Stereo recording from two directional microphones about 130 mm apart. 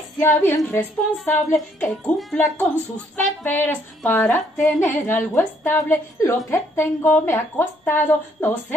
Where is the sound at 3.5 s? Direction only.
15° left (ahead or behind).